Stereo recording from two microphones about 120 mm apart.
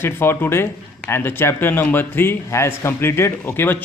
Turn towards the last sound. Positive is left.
turn(degrees=15)  # may be behind; listen again after turning